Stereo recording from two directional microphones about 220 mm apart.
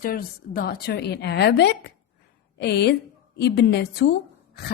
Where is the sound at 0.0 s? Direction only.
40° left (ahead or behind).